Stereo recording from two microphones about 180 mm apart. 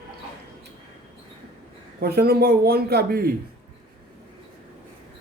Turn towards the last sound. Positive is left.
turn(degrees=-60)  # may be behind; listen again after turning